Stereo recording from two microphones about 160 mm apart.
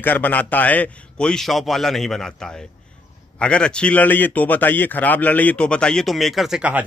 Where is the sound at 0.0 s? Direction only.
10° left (ahead or behind).